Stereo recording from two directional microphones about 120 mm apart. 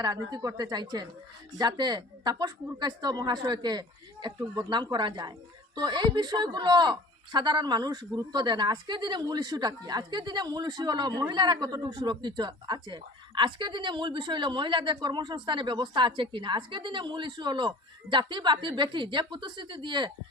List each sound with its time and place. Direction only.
0.0 s speech: 35° right (ahead or behind)